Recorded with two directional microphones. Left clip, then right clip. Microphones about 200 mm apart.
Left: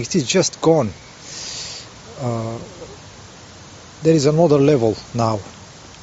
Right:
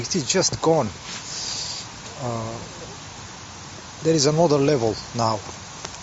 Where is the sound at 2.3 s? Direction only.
50° left (ahead or behind).